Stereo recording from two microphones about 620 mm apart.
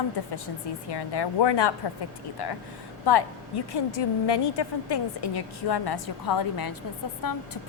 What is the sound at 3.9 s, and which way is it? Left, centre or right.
A woman's voice, left.